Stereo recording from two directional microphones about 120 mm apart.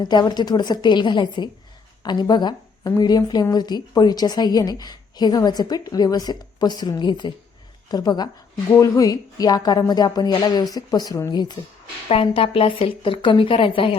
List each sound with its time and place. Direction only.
0.0 s a woman's voice: 35° left (ahead or behind)
12.0 s a woman's voice: 50° left (ahead or behind)